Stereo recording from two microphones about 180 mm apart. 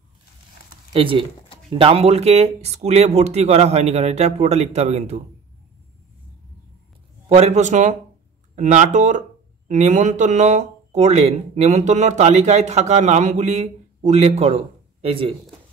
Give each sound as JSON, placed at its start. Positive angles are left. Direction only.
{"t": 0.9, "sound": "speech", "side_deg": -30}
{"t": 7.2, "sound": "speech", "side_deg": -40}